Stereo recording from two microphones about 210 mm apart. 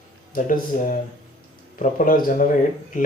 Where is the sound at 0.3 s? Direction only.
40° left (ahead or behind).